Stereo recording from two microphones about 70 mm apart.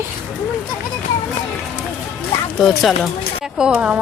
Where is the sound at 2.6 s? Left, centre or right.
Centre.